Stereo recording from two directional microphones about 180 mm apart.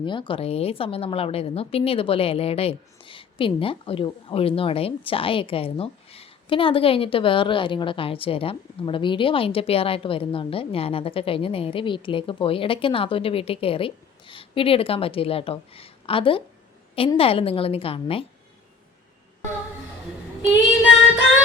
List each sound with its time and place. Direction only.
0.0 s a woman's voice: 25° left (ahead or behind)